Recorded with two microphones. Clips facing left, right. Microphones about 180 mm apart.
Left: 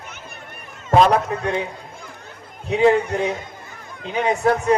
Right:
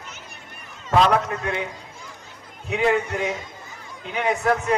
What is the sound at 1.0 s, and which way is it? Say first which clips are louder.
Speech: left 3 dB; 35° left (ahead or behind).